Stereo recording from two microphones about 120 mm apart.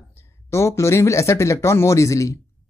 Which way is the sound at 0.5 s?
25° left (ahead or behind).